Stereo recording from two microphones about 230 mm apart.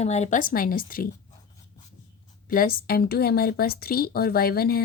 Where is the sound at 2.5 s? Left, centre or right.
Left.